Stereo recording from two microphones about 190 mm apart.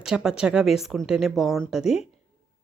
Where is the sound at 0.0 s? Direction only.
5° right (ahead or behind).